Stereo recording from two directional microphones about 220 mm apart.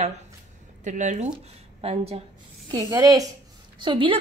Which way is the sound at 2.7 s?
15° right (ahead or behind).